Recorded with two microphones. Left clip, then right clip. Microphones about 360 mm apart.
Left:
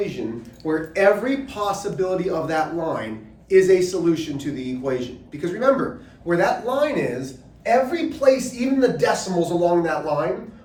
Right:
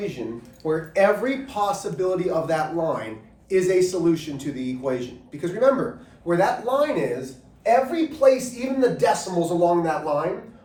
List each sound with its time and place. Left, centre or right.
0.6 s speech: centre